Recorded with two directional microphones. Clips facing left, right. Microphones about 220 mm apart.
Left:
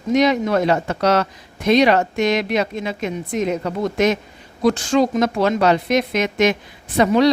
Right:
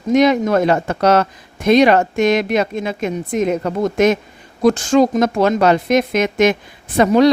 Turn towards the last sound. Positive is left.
turn(degrees=-50)  # may be behind; listen again after turning